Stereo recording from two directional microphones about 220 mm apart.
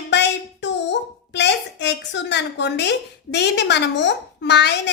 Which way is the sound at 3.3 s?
50° left (ahead or behind).